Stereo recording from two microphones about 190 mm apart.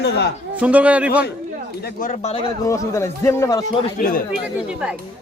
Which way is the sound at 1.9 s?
45° left (ahead or behind).